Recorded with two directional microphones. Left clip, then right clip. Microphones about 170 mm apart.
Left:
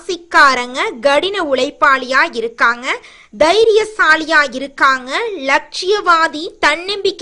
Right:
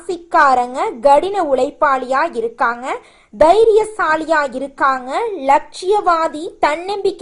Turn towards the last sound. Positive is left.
turn(degrees=15)  # may be behind; listen again after turning